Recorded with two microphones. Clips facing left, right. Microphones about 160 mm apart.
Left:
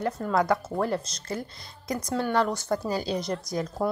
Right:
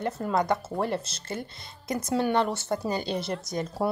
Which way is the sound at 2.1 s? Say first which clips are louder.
Right 1 dB; 15° right (ahead or behind).